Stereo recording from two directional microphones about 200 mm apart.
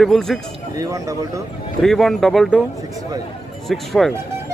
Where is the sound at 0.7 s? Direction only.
15° right (ahead or behind).